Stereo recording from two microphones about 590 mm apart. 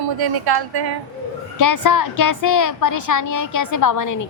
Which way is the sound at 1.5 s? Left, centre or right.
Left.